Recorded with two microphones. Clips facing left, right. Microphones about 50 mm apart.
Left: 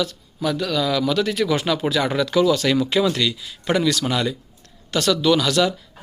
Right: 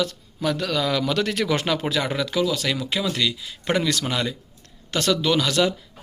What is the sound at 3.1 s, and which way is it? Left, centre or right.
Speech, centre.